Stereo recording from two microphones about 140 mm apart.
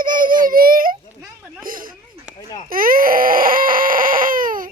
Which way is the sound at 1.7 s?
85° right.